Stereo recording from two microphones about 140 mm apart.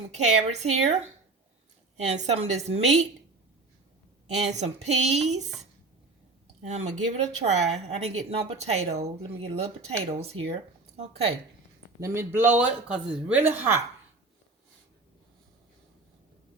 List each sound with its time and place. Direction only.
0.1 s speech: 55° right (ahead or behind)
4.4 s speech: 55° right (ahead or behind)
6.6 s speech: 55° right (ahead or behind)
11.9 s speech: 20° right (ahead or behind)